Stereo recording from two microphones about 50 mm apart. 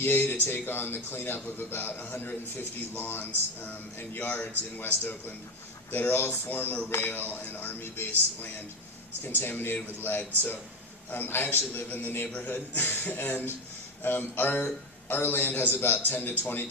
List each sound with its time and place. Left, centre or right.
0.0 s a man's voice: left
9.2 s a man's voice: left
12.7 s a man's voice: left